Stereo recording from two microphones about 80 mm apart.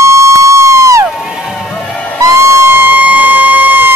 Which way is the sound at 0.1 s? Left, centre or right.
Right.